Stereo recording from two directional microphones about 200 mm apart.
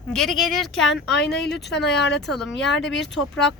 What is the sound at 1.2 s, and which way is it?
Speech, 55° left (ahead or behind).